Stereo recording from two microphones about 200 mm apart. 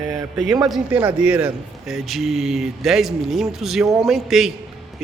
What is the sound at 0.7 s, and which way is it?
Speech, 5° right (ahead or behind).